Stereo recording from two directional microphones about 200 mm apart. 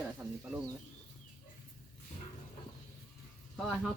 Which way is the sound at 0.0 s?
5° right (ahead or behind).